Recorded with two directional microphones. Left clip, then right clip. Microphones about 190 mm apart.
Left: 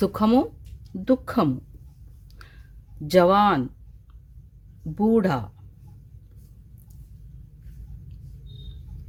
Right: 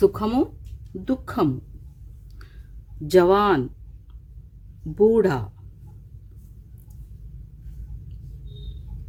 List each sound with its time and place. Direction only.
0.0 s speech: 40° left (ahead or behind)
3.1 s speech: 25° left (ahead or behind)
4.9 s speech: 25° left (ahead or behind)